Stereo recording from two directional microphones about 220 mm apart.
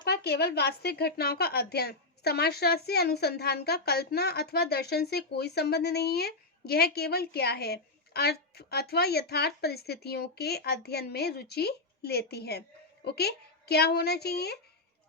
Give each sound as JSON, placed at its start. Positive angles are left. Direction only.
{"t": 0.0, "sound": "a woman's voice", "side_deg": 45}